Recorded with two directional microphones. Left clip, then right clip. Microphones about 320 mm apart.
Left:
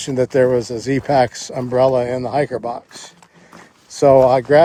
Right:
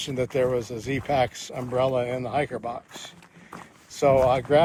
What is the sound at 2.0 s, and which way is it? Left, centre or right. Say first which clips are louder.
Speech: left 8 dB; left.